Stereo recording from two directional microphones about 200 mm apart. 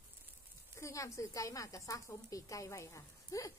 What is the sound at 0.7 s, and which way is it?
A woman's voice, 15° left (ahead or behind).